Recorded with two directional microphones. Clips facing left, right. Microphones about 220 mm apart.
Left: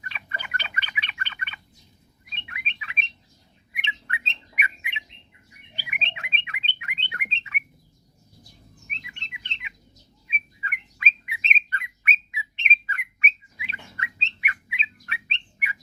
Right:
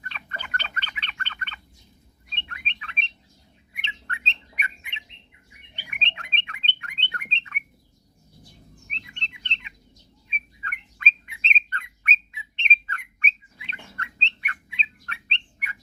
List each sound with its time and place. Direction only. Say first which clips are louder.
0.0 s bird: even; 10° left (ahead or behind)
8.9 s bird: even; 10° left (ahead or behind)